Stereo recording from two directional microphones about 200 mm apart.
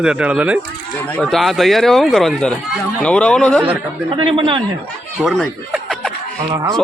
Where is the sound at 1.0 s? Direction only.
5° left (ahead or behind).